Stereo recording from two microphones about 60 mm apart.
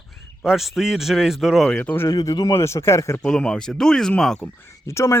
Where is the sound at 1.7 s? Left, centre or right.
Left.